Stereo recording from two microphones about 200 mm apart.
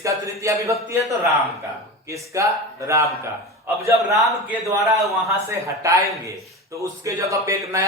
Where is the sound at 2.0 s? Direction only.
15° right (ahead or behind).